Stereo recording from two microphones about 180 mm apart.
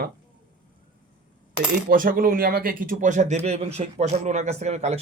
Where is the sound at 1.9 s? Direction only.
50° right (ahead or behind).